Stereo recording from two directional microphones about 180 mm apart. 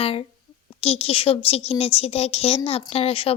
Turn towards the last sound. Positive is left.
turn(degrees=30)  # may be behind; listen again after turning